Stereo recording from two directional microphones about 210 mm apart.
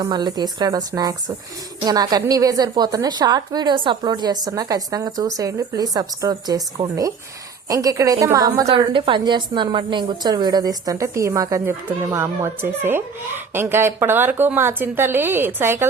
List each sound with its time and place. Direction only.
0.0 s a woman's voice: 20° right (ahead or behind)